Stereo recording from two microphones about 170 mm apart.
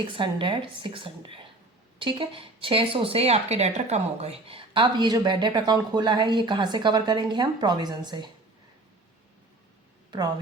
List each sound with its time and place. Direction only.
0.1 s speech: 30° right (ahead or behind)